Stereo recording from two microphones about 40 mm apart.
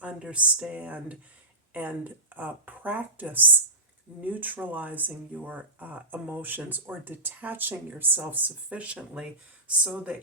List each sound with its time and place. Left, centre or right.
0.0 s speech: right
9.0 s speech: right